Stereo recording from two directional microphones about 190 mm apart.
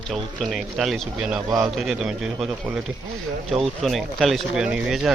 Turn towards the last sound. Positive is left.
turn(degrees=0)  # may be behind; listen again after turning